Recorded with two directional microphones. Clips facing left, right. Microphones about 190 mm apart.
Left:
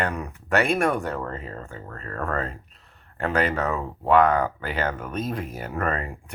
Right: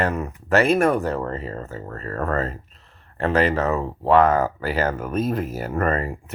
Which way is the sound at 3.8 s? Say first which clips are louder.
Right 4 dB; 30° right (ahead or behind).